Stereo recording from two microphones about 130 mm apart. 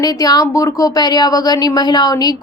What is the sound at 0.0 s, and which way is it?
A woman's voice, 30° left (ahead or behind).